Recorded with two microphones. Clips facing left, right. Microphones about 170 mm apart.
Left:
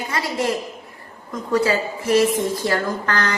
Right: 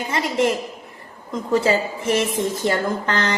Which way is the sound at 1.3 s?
25° right (ahead or behind).